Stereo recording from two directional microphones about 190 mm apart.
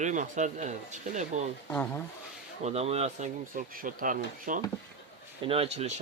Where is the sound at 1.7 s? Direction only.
10° left (ahead or behind).